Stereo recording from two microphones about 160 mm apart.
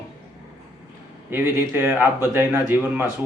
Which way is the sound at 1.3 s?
15° right (ahead or behind).